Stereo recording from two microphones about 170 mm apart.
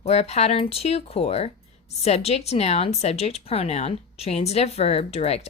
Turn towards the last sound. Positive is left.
turn(degrees=40)  # may be behind; listen again after turning